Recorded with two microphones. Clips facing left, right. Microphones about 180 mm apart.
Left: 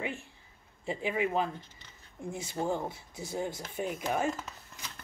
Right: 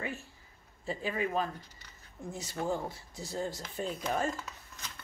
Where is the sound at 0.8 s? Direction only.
15° left (ahead or behind).